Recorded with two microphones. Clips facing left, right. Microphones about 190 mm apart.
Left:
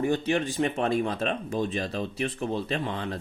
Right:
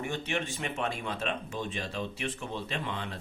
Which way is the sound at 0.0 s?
35° left (ahead or behind).